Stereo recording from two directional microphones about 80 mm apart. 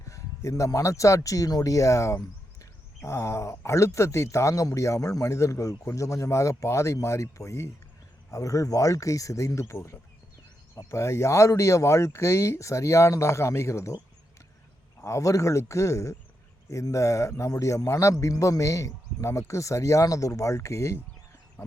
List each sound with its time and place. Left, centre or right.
0.0 s speech: left
15.0 s speech: left